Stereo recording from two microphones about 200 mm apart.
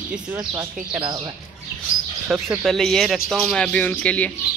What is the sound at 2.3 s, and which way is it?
Speech, centre (ahead or behind).